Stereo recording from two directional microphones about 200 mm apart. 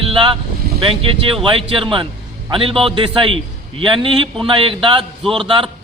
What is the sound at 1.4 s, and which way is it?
A man's voice, 25° right (ahead or behind).